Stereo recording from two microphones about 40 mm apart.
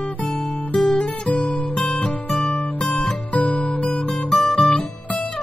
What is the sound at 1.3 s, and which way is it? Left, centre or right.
Music, left.